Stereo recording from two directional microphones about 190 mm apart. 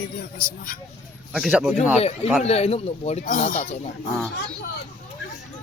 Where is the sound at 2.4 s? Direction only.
35° left (ahead or behind).